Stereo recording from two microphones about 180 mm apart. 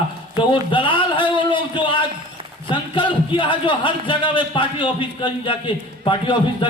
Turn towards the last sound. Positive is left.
turn(degrees=25)  # may be behind; listen again after turning